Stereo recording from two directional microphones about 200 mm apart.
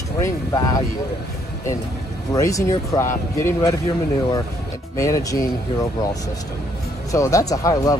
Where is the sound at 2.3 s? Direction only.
15° left (ahead or behind).